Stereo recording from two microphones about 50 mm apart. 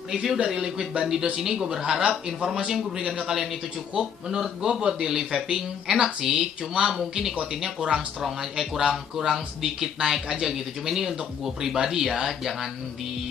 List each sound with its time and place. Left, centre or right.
0.1 s speech: centre